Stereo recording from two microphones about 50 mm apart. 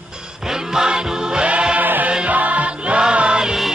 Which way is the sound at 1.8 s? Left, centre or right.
Right.